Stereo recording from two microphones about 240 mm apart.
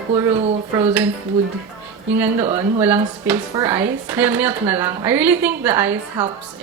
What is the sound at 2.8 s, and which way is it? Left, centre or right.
Speech, centre.